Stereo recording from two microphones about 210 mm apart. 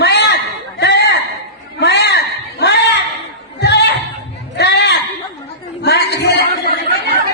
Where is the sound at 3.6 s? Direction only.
50° left (ahead or behind).